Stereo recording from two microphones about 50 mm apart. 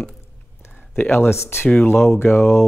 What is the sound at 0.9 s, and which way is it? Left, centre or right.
Speech, left.